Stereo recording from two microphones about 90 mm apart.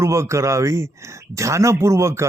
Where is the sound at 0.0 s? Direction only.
30° right (ahead or behind).